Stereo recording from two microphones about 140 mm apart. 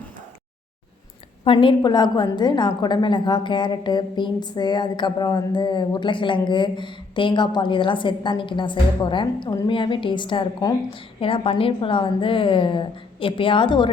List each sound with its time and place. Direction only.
1.5 s a woman's voice: 35° left (ahead or behind)